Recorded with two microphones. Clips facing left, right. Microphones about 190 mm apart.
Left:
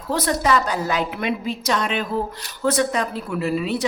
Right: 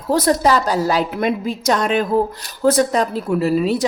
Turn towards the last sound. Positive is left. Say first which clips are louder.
# right 5 dB
turn(degrees=-40)  # may be behind; listen again after turning